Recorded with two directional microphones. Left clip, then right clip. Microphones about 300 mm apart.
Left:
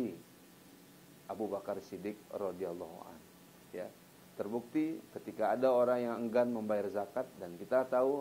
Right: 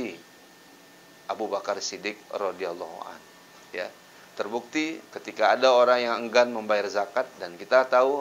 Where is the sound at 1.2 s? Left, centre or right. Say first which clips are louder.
Right 10 dB; centre.